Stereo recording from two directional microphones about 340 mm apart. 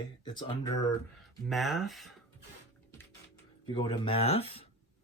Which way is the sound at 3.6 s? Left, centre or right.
Centre.